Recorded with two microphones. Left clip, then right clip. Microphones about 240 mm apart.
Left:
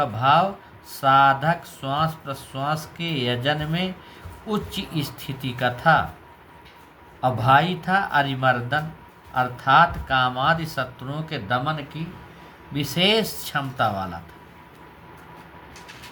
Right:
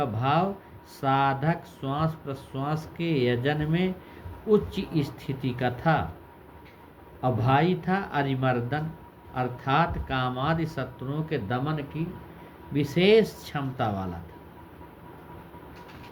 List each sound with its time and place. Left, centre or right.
0.0 s speech: left
7.2 s speech: left